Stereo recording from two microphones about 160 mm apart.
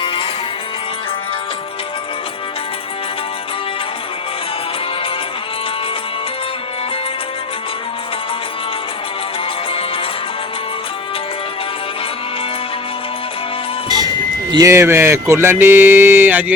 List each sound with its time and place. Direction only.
0.0 s music: 30° left (ahead or behind)
13.8 s music: 25° right (ahead or behind)
14.5 s speech: 20° right (ahead or behind)